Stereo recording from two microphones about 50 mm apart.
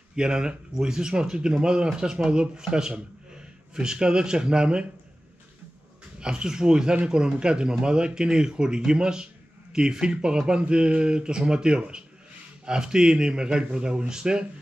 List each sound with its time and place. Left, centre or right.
0.1 s speech: centre
6.1 s speech: centre